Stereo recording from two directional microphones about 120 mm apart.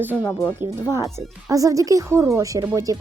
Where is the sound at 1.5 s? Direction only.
30° right (ahead or behind).